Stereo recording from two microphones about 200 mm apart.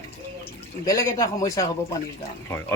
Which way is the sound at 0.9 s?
15° left (ahead or behind).